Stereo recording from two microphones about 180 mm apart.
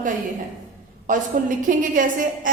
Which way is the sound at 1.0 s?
45° right (ahead or behind).